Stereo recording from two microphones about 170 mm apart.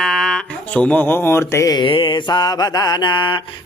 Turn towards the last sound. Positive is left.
turn(degrees=30)  # may be behind; listen again after turning